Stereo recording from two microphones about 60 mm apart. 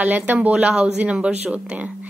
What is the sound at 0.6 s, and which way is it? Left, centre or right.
Speech, centre.